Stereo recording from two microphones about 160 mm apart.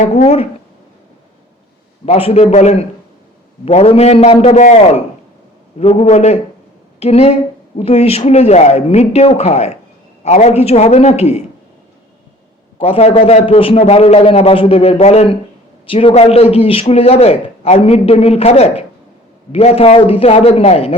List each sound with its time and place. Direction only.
0.1 s a man's voice: 40° left (ahead or behind)
2.0 s a man's voice: 40° left (ahead or behind)
5.8 s a man's voice: 40° left (ahead or behind)
12.8 s a man's voice: 40° left (ahead or behind)